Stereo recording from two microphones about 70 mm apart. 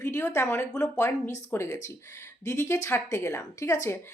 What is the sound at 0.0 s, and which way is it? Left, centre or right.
Speech, left.